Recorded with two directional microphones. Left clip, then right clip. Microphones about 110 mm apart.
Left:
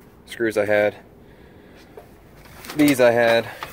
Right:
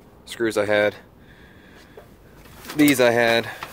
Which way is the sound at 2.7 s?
20° right (ahead or behind).